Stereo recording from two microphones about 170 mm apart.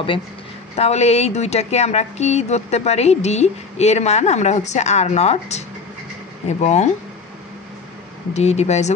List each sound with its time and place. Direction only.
0.7 s speech: 40° left (ahead or behind)
6.6 s speech: 40° left (ahead or behind)
8.3 s speech: 40° left (ahead or behind)